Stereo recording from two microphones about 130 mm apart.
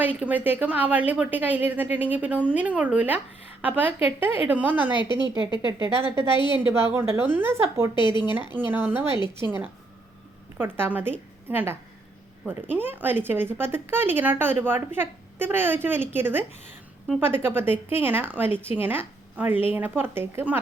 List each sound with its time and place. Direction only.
0.2 s speech: 15° right (ahead or behind)
5.4 s speech: 35° left (ahead or behind)
6.7 s a woman's voice: 20° right (ahead or behind)
7.9 s speech: 35° left (ahead or behind)
8.5 s speech: 15° right (ahead or behind)